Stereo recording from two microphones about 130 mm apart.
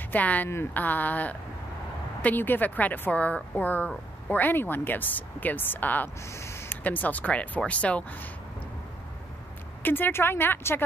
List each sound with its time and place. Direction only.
0.1 s speech: 10° left (ahead or behind)
9.8 s speech: 15° left (ahead or behind)